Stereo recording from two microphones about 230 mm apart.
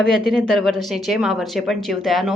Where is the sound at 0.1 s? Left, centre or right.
Centre.